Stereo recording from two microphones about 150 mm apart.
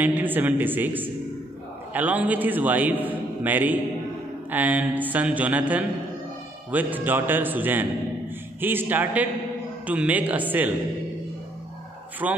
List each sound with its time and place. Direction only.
0.0 s a man's voice: 10° right (ahead or behind)
12.2 s a man's voice: 10° right (ahead or behind)